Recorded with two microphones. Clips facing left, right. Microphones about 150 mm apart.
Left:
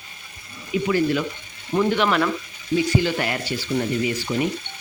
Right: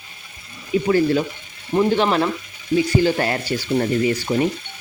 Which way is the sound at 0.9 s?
35° right (ahead or behind).